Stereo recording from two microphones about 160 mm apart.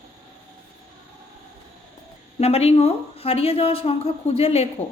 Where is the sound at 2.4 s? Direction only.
40° left (ahead or behind).